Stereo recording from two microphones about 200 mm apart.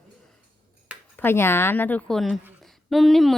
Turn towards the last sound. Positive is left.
turn(degrees=0)  # may be behind; listen again after turning